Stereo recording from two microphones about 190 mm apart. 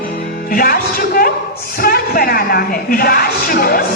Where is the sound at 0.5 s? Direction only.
50° left (ahead or behind).